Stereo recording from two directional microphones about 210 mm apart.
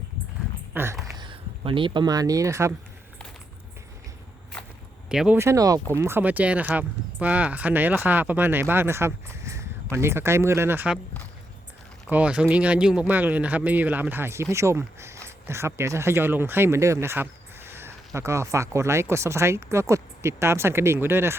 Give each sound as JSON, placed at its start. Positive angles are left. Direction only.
{"t": 0.7, "sound": "speech", "side_deg": -10}
{"t": 1.1, "sound": "speech", "side_deg": -25}
{"t": 5.0, "sound": "speech", "side_deg": -5}
{"t": 12.0, "sound": "speech", "side_deg": -5}